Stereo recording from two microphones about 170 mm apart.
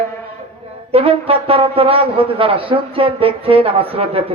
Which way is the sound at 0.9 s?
35° right (ahead or behind).